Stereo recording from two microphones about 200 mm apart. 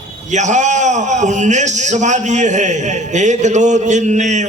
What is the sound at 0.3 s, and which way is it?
A man's voice, 35° right (ahead or behind).